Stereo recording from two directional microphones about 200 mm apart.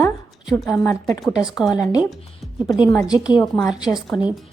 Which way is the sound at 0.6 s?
10° left (ahead or behind).